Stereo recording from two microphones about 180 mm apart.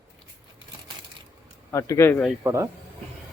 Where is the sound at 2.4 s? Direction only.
15° right (ahead or behind).